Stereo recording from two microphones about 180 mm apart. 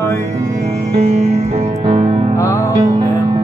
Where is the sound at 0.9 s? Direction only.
35° right (ahead or behind).